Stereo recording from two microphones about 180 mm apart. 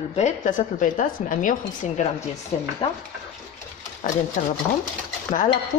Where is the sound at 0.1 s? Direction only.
40° left (ahead or behind).